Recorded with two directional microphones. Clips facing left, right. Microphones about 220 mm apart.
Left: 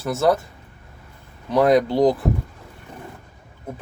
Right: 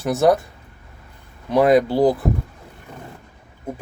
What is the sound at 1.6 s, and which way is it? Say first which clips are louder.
Speech: right 1 dB; 5° right (ahead or behind).